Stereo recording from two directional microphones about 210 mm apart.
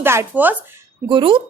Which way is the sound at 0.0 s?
10° right (ahead or behind).